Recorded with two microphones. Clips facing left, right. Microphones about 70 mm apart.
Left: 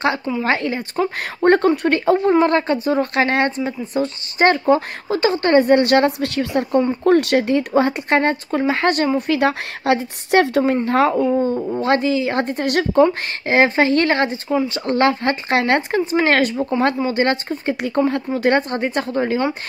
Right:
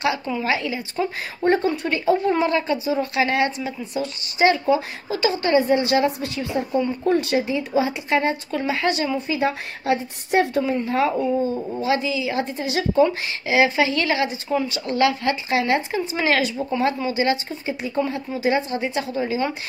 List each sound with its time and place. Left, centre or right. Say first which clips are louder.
0.4 s speech: left 4 dB; left
9.3 s speech: left 5 dB; left
10.9 s speech: left 5 dB; left